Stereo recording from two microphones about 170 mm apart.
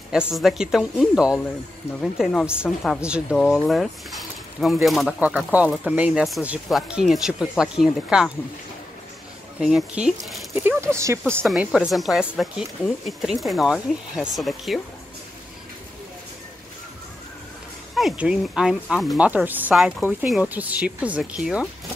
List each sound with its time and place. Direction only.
0.3 s speech: centre (ahead or behind)
9.6 s speech: 5° right (ahead or behind)
11.2 s speech: 5° right (ahead or behind)
17.9 s speech: 5° right (ahead or behind)